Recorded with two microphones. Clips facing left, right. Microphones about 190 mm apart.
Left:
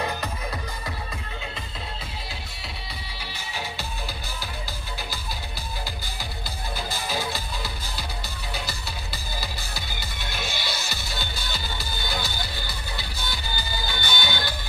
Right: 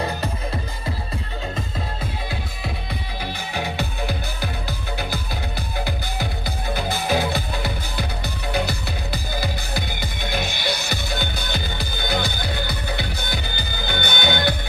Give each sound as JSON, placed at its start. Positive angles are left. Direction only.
{"t": 3.5, "sound": "music", "side_deg": -55}
{"t": 6.7, "sound": "music", "side_deg": -60}